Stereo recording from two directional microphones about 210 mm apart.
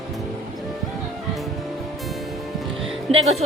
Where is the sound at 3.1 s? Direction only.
30° right (ahead or behind).